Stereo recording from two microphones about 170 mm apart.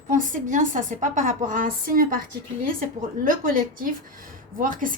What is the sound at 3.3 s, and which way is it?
A woman's voice, 55° right (ahead or behind).